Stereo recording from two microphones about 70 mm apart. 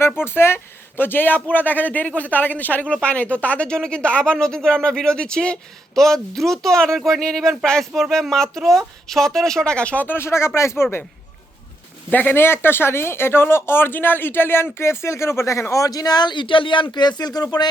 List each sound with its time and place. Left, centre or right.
0.3 s speech: left
10.2 s speech: left
12.1 s speech: left
15.7 s speech: left